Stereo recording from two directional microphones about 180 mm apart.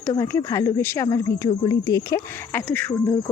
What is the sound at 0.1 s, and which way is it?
Speech, 15° left (ahead or behind).